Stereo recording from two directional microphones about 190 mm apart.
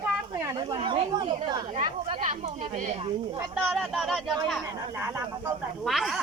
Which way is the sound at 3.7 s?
Centre (ahead or behind).